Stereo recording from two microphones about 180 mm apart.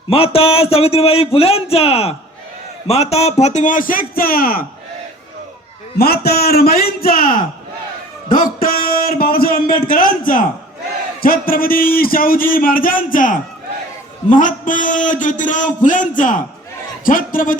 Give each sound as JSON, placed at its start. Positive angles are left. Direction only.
{"t": 0.1, "sound": "a man's voice", "side_deg": 30}
{"t": 6.0, "sound": "a man's voice", "side_deg": 60}